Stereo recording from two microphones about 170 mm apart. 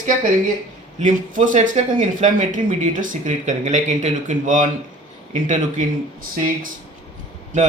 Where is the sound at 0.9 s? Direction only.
50° right (ahead or behind).